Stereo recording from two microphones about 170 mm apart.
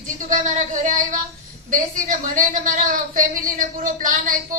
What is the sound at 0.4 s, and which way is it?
A woman's voice, 50° right (ahead or behind).